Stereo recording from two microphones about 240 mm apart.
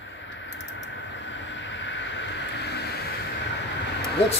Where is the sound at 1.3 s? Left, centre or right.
Left.